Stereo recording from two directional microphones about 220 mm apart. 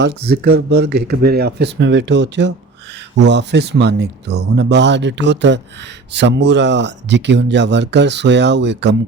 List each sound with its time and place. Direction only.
0.0 s speech: 50° right (ahead or behind)